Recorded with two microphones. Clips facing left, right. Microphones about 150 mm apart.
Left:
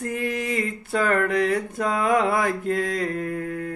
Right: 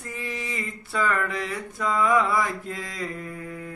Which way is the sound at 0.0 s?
55° left (ahead or behind).